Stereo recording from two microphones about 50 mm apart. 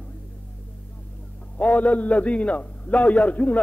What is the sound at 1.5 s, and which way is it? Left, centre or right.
A man's voice, left.